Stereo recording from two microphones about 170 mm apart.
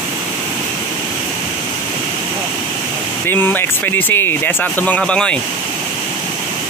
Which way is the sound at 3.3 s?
10° left (ahead or behind).